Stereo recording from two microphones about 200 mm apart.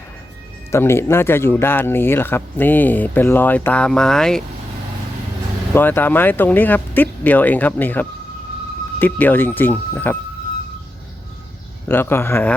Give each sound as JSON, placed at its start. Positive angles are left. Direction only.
{"t": 0.7, "sound": "speech", "side_deg": 10}
{"t": 5.7, "sound": "speech", "side_deg": 10}
{"t": 11.9, "sound": "speech", "side_deg": 10}